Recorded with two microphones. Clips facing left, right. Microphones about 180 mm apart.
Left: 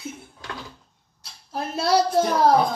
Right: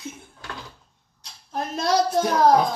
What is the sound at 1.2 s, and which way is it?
Speech, 10° left (ahead or behind).